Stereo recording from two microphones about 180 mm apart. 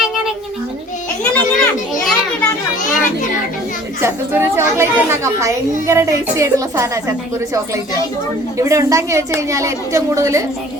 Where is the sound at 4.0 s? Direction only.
15° right (ahead or behind).